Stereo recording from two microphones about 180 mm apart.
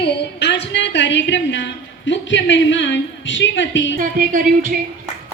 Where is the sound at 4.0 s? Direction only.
50° right (ahead or behind).